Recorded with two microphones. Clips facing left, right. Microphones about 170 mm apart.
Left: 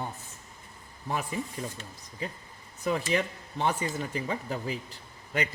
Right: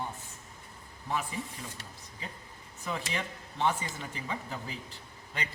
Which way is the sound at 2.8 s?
40° left (ahead or behind).